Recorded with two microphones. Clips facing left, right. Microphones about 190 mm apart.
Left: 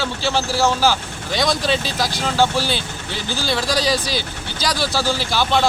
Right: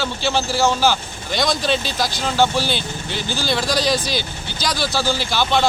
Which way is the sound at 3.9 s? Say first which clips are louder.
Even; 35° left (ahead or behind).